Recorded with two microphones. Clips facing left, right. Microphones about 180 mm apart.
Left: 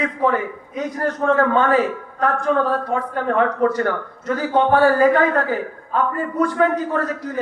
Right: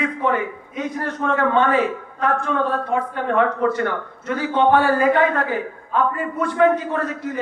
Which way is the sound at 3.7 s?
40° left (ahead or behind).